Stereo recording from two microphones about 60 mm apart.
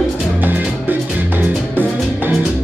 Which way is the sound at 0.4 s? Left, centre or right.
Right.